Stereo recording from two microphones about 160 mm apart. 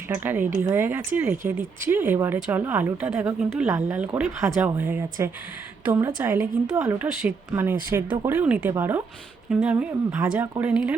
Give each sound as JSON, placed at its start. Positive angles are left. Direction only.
{"t": 0.1, "sound": "speech", "side_deg": -10}